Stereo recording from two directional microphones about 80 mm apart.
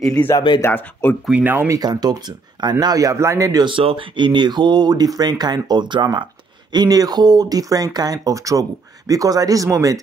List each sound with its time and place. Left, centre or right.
0.2 s speech: centre
1.4 s speech: right
1.8 s speech: right
3.6 s speech: right
6.7 s speech: right